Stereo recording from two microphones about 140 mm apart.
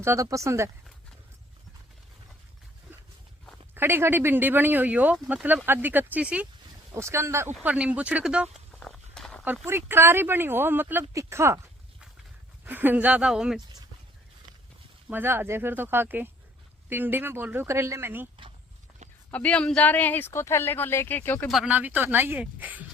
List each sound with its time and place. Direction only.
0.0 s speech: 20° right (ahead or behind)
3.8 s speech: 15° right (ahead or behind)
8.8 s walk: 5° left (ahead or behind)
9.6 s speech: 20° right (ahead or behind)
12.6 s speech: 15° right (ahead or behind)
15.1 s speech: 15° right (ahead or behind)
19.3 s speech: 10° left (ahead or behind)
21.4 s speech: centre (ahead or behind)
21.7 s speech: 10° right (ahead or behind)